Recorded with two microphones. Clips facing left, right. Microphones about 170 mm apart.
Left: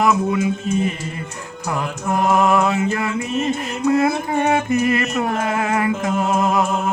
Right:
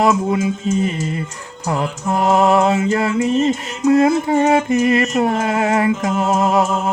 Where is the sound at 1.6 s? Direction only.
30° right (ahead or behind).